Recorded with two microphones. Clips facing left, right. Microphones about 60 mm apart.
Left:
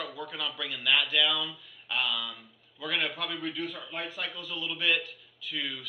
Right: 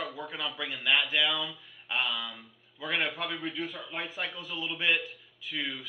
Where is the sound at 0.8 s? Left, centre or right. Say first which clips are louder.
Left 1 dB; centre.